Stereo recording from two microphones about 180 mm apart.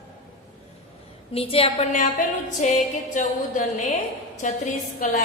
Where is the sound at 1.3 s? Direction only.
30° left (ahead or behind).